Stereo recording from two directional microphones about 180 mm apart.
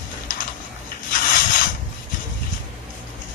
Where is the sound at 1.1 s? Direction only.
50° left (ahead or behind).